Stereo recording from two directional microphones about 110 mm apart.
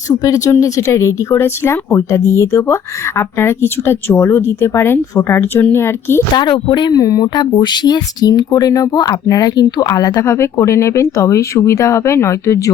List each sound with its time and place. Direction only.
0.1 s speech: 30° left (ahead or behind)
6.3 s speech: 45° left (ahead or behind)
10.2 s speech: 25° left (ahead or behind)